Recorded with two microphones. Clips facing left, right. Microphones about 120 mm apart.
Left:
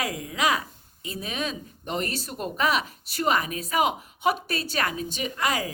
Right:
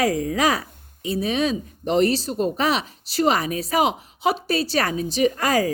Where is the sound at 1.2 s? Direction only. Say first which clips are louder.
Right 8 dB; 30° right (ahead or behind).